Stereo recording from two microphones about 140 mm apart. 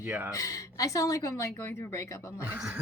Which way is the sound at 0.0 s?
10° right (ahead or behind).